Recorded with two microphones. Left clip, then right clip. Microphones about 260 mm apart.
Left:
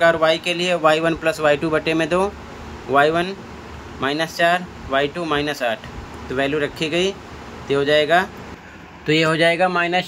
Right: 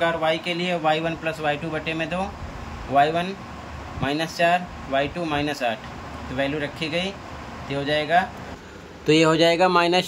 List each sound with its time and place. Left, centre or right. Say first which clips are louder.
0.0 s a man's voice: left 6 dB; centre
9.0 s speech: left 1 dB; centre